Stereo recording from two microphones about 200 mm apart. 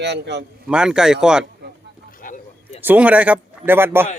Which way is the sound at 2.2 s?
40° left (ahead or behind).